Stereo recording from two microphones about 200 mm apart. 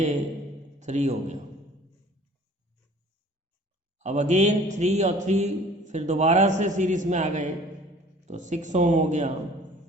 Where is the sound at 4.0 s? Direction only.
35° right (ahead or behind).